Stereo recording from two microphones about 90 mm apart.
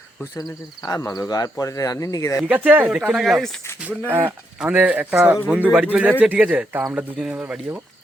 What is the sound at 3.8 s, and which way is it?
Speech, 20° right (ahead or behind).